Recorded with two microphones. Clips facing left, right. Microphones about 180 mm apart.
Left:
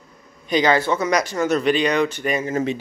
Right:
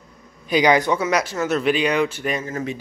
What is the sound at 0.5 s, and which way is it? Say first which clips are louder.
Speech: right 1 dB; 10° right (ahead or behind).